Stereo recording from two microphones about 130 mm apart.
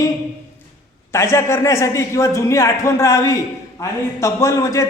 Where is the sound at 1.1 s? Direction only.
20° left (ahead or behind).